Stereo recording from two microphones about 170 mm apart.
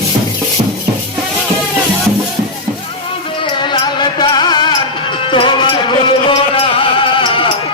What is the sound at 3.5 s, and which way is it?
Music, 25° left (ahead or behind).